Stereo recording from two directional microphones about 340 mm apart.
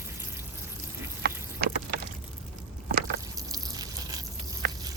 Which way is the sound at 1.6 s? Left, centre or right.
Right.